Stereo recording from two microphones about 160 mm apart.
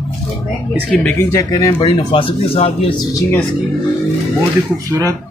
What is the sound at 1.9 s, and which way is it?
Speech, 30° left (ahead or behind).